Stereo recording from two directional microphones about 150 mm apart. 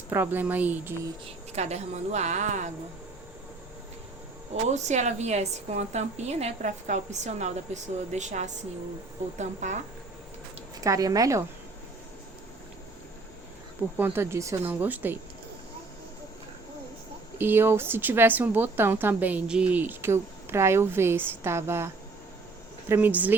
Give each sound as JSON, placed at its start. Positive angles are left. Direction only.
{"t": 0.1, "sound": "a woman's voice", "side_deg": -15}
{"t": 1.5, "sound": "a woman's voice", "side_deg": -45}
{"t": 4.7, "sound": "a woman's voice", "side_deg": -50}
{"t": 10.8, "sound": "speech", "side_deg": -20}
{"t": 13.9, "sound": "a woman's voice", "side_deg": -15}
{"t": 17.3, "sound": "a woman's voice", "side_deg": -15}
{"t": 22.9, "sound": "a woman's voice", "side_deg": -10}